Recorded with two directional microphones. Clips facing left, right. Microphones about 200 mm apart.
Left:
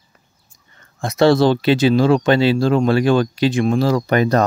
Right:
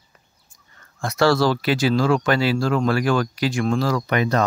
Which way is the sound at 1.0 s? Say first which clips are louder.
Left 5 dB; 20° left (ahead or behind).